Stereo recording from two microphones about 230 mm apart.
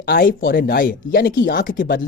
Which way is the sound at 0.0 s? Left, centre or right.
Left.